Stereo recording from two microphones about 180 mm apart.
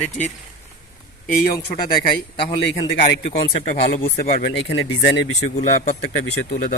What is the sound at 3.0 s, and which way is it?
Speech, 45° left (ahead or behind).